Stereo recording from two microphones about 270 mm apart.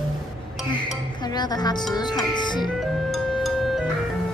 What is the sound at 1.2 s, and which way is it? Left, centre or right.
Music, centre.